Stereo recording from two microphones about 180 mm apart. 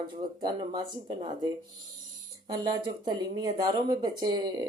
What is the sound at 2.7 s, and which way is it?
Speech, 25° right (ahead or behind).